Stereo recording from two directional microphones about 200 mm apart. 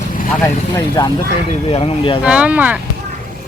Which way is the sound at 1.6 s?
30° left (ahead or behind).